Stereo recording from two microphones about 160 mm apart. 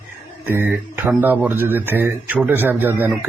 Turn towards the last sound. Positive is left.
turn(degrees=-10)  # may be behind; listen again after turning